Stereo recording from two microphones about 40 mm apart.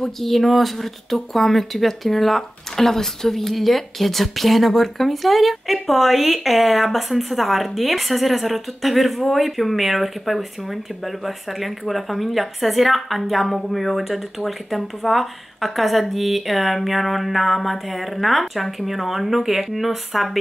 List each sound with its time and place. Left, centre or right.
0.0 s speech: centre